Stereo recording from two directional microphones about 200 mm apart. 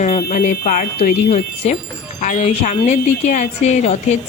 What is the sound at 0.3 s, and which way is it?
A woman's voice, 45° left (ahead or behind).